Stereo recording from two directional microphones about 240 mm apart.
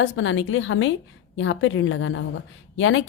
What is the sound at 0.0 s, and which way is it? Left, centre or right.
A woman's voice, left.